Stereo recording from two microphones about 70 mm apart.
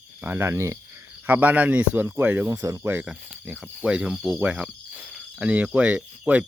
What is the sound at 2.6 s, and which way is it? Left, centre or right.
Speech, right.